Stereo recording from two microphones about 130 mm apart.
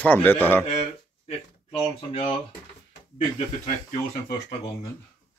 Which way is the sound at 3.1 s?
65° left (ahead or behind).